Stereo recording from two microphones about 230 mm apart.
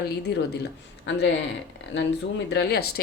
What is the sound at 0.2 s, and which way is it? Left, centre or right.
Speech, left.